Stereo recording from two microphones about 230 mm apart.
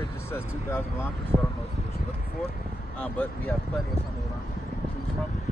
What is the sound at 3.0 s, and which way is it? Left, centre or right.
Speech, centre.